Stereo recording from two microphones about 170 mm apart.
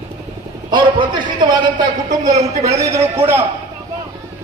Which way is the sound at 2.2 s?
20° right (ahead or behind).